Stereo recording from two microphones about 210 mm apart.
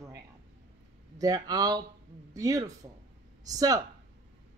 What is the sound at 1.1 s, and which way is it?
A man's voice, 15° right (ahead or behind).